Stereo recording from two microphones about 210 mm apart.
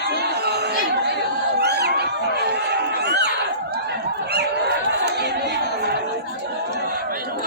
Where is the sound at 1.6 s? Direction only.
50° right (ahead or behind).